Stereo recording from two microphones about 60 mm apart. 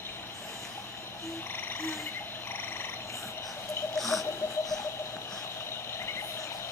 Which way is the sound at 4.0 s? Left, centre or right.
Centre.